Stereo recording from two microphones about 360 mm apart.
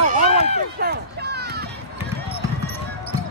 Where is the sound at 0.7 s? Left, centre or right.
Right.